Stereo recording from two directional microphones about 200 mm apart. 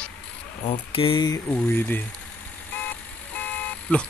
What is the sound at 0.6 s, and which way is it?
Speech, 30° left (ahead or behind).